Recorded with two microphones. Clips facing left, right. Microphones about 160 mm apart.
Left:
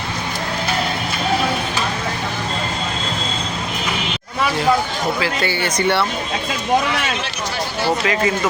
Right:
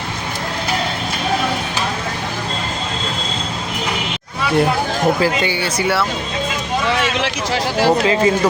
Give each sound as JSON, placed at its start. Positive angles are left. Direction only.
{"t": 5.4, "sound": "speech", "side_deg": -10}
{"t": 7.2, "sound": "a sound", "side_deg": -90}
{"t": 7.9, "sound": "speech", "side_deg": -30}